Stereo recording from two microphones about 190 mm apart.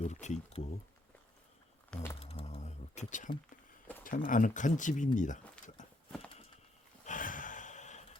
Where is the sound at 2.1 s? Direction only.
30° left (ahead or behind).